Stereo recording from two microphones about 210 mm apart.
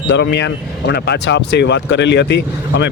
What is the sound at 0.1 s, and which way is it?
Speech, 55° left (ahead or behind).